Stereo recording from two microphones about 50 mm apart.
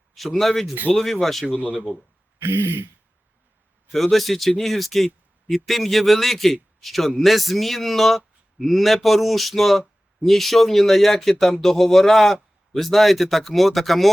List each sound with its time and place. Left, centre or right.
0.2 s speech: centre
1.5 s a man's voice: right
2.4 s speech: right
3.9 s speech: centre